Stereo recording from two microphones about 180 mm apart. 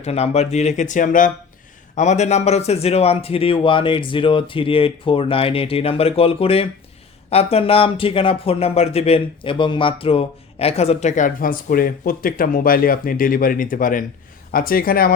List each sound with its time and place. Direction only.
0.0 s speech: 35° left (ahead or behind); by 15.1 s 55° left (ahead or behind)